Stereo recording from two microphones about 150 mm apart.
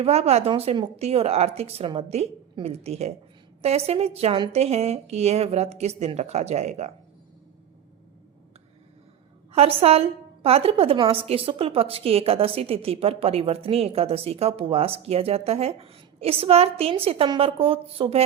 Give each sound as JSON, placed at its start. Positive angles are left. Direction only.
{"t": 0.0, "sound": "a woman's voice", "side_deg": -45}
{"t": 9.5, "sound": "a woman's voice", "side_deg": -45}